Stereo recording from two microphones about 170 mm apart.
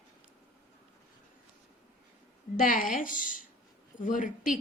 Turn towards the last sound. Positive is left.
turn(degrees=50)  # may be behind; listen again after turning